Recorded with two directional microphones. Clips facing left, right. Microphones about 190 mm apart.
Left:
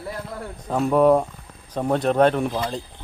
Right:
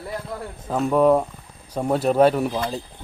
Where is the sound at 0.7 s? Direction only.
Centre (ahead or behind).